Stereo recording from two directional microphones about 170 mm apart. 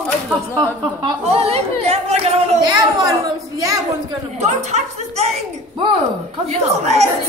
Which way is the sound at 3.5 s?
20° right (ahead or behind).